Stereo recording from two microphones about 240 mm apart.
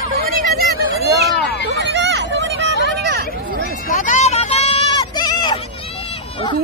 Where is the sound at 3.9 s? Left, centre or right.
Left; by 5.5 s centre.